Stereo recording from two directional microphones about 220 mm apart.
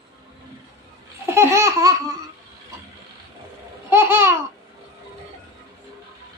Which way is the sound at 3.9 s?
10° right (ahead or behind).